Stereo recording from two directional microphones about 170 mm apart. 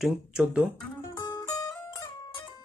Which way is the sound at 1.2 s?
25° left (ahead or behind).